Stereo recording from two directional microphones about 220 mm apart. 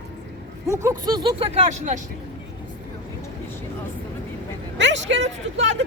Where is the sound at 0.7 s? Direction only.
15° right (ahead or behind); by 2.0 s 35° right (ahead or behind).